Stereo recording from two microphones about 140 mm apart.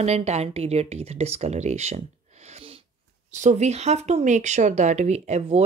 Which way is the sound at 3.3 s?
55° right (ahead or behind).